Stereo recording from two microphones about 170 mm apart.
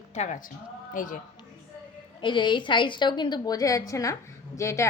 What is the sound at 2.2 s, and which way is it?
A woman's voice, 30° left (ahead or behind).